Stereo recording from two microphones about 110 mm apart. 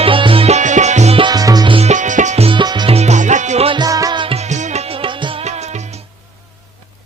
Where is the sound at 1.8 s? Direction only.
85° right.